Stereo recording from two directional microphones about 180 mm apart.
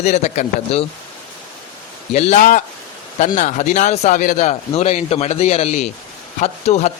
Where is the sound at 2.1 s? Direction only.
40° left (ahead or behind).